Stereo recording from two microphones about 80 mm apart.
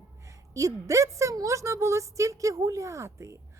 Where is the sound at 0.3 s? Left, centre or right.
Right.